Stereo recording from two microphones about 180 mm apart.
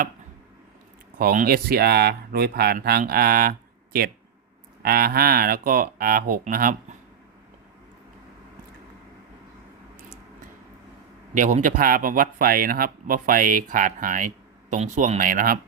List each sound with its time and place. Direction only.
1.2 s speech: 55° right (ahead or behind)
4.8 s speech: 55° right (ahead or behind)
11.3 s speech: 45° right (ahead or behind)